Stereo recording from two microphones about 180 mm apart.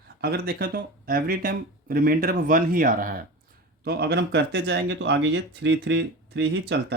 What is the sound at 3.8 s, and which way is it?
Speech, 65° right (ahead or behind).